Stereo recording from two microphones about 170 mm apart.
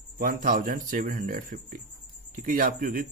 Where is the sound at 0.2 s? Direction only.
55° right (ahead or behind).